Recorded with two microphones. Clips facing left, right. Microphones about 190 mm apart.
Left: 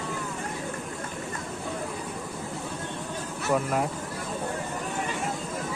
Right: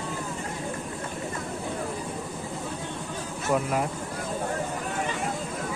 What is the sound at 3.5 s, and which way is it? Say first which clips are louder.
Speech: even; centre (ahead or behind).